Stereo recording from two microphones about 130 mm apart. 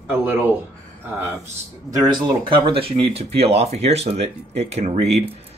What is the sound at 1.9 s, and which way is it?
Speech, 35° right (ahead or behind).